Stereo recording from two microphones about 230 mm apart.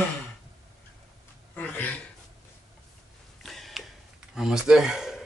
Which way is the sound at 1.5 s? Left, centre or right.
Centre.